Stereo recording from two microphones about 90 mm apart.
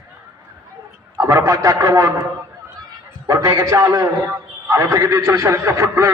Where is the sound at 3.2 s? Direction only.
40° right (ahead or behind).